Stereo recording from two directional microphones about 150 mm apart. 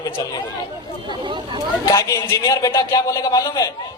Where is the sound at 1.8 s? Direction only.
20° left (ahead or behind).